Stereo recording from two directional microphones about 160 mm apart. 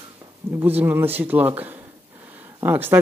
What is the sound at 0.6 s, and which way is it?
A man's voice, 10° right (ahead or behind).